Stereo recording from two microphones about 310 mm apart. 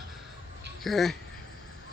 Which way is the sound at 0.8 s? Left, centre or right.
Centre.